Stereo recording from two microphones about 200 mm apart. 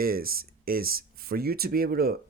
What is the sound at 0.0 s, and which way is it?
Speech, 45° right (ahead or behind).